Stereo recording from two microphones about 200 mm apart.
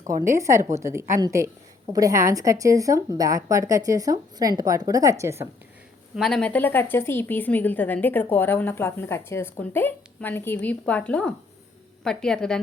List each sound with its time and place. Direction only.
0.3 s a woman's voice: 15° right (ahead or behind)
6.1 s a woman's voice: centre (ahead or behind)